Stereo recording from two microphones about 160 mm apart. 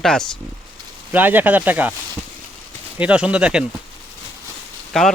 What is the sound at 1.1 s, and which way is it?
Speech, 10° right (ahead or behind).